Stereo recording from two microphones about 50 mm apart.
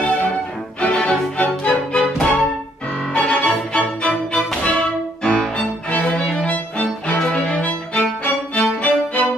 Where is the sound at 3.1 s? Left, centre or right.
Left.